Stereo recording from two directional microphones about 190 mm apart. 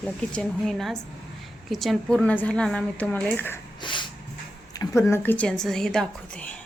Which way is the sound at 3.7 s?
25° left (ahead or behind).